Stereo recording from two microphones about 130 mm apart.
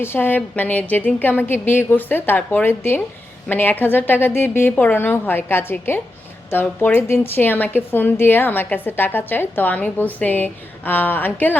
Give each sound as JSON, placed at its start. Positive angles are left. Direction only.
{"t": 0.0, "sound": "a woman's voice", "side_deg": 15}